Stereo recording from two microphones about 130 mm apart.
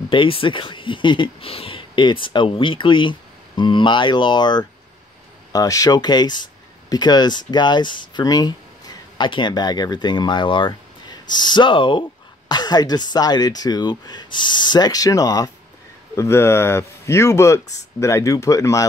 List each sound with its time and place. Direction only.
0.1 s speech: 40° left (ahead or behind); by 18.9 s 25° left (ahead or behind)